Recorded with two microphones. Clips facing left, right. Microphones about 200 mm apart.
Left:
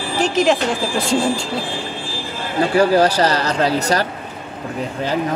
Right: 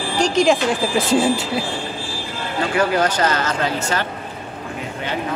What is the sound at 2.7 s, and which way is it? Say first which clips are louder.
Speech: left 5 dB; 30° left (ahead or behind).